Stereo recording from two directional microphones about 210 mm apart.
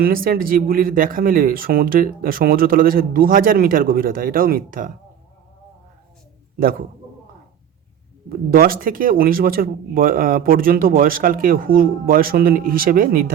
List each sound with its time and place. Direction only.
0.0 s speech: 45° right (ahead or behind)
8.3 s speech: 45° right (ahead or behind)